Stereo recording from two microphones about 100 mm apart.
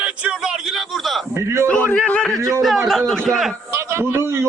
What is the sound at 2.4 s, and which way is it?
Speech, 35° right (ahead or behind).